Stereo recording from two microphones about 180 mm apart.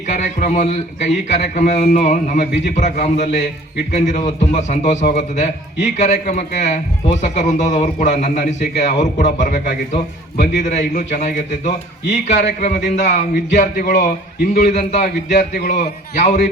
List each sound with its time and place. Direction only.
0.1 s a man's voice: 45° left (ahead or behind)
12.5 s a man's voice: 55° left (ahead or behind)